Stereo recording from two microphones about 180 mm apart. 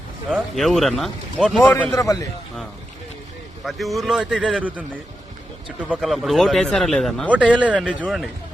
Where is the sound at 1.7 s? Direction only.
15° left (ahead or behind).